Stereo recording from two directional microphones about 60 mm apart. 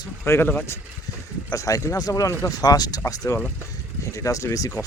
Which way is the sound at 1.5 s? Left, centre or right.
Left.